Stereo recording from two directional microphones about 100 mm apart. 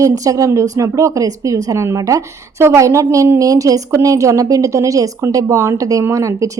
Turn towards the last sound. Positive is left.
turn(degrees=-30)  # may be behind; listen again after turning